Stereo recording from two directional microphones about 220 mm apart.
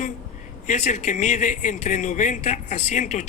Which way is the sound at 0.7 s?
30° left (ahead or behind).